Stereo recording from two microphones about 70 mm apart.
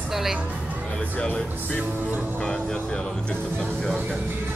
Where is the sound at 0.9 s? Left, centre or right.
Centre.